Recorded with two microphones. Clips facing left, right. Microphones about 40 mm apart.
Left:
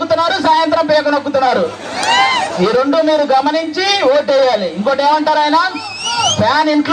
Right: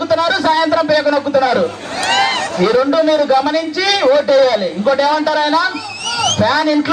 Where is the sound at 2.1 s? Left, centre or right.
Left.